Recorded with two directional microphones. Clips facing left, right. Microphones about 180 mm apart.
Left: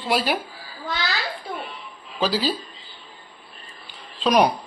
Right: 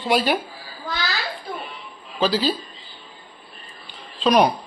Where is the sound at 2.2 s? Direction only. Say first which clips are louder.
Right 2 dB; 5° left (ahead or behind).